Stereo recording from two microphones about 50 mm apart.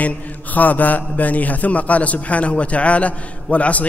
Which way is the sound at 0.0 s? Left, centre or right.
Left.